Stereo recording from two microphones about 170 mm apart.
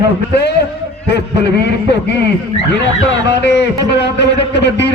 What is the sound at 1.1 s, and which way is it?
A man's voice, 80° left.